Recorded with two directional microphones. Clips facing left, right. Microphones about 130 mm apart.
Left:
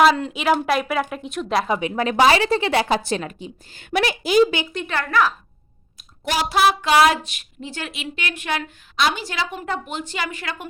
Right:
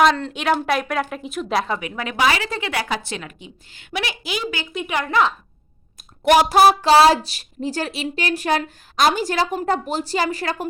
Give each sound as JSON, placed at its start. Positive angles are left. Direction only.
{"t": 0.0, "sound": "speech", "side_deg": 5}
{"t": 1.8, "sound": "a woman's voice", "side_deg": 30}
{"t": 4.7, "sound": "speech", "side_deg": -5}
{"t": 4.9, "sound": "a woman's voice", "side_deg": -20}
{"t": 6.2, "sound": "a sound", "side_deg": -55}
{"t": 6.6, "sound": "speech", "side_deg": -35}